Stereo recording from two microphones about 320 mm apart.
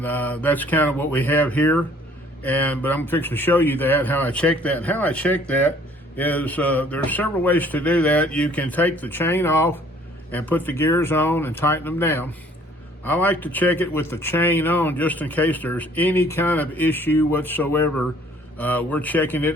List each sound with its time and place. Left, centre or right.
0.0 s speech: centre